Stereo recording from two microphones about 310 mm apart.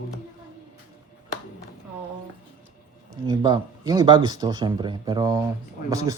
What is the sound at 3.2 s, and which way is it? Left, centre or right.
A woman's voice, centre.